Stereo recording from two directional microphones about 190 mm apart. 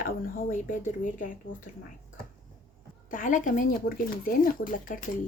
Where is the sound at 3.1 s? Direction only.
45° left (ahead or behind).